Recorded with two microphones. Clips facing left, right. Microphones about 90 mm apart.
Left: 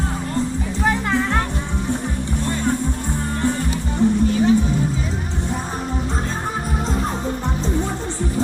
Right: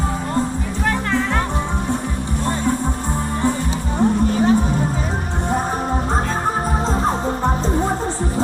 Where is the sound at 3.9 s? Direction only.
45° right (ahead or behind).